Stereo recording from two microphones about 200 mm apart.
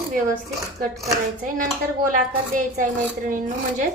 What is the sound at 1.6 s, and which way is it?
A woman's voice, 40° right (ahead or behind).